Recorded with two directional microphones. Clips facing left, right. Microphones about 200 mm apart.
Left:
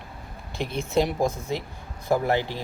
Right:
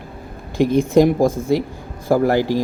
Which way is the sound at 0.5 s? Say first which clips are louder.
Right 14 dB; 50° right (ahead or behind).